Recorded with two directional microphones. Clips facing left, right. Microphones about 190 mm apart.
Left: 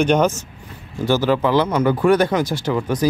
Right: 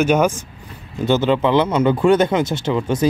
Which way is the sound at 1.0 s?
20° right (ahead or behind).